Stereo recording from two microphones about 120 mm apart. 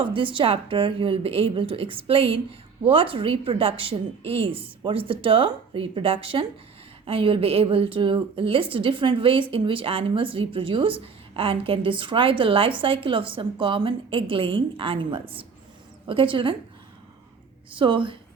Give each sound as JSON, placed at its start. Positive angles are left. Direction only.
{"t": 0.0, "sound": "a woman's voice", "side_deg": -45}
{"t": 17.7, "sound": "a woman's voice", "side_deg": -45}